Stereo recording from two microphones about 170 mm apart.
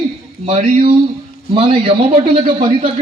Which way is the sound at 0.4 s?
35° right (ahead or behind).